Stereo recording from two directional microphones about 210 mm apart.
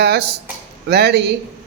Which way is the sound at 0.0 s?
55° right (ahead or behind).